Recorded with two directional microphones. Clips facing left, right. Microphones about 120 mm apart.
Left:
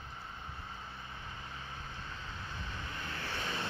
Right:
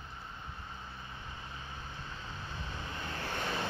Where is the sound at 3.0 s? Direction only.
40° right (ahead or behind).